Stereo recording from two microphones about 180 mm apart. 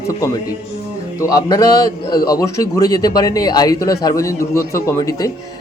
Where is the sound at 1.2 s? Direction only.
20° left (ahead or behind).